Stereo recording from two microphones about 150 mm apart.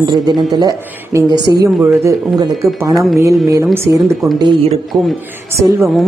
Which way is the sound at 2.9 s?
Centre (ahead or behind).